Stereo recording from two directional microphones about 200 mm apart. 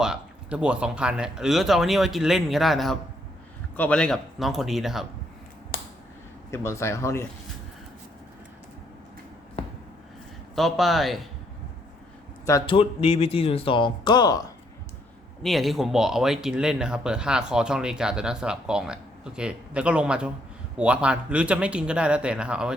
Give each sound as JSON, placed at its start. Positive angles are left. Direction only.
{"t": 0.0, "sound": "speech", "side_deg": -5}
{"t": 5.7, "sound": "a sound", "side_deg": 45}
{"t": 6.5, "sound": "speech", "side_deg": 15}
{"t": 10.5, "sound": "speech", "side_deg": 0}
{"t": 12.5, "sound": "speech", "side_deg": 20}
{"t": 15.4, "sound": "speech", "side_deg": 0}